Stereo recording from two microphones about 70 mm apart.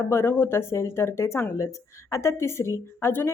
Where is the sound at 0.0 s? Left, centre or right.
Left.